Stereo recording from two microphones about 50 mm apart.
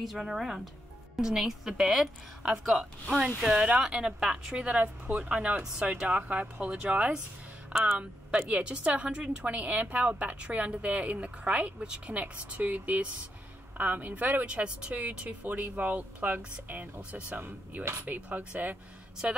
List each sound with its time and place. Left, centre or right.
0.0 s a woman's voice: centre
4.6 s speech: right
5.6 s speech: centre; by 14.4 s right
14.4 s speech: right